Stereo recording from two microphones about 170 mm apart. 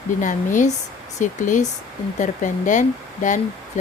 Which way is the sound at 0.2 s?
50° left (ahead or behind).